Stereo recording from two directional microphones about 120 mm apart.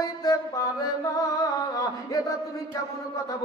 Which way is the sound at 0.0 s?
30° left (ahead or behind).